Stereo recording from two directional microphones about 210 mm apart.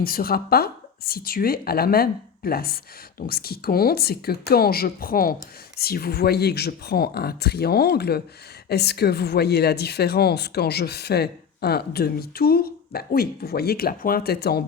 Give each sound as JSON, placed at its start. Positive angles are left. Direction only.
{"t": 0.0, "sound": "speech", "side_deg": 45}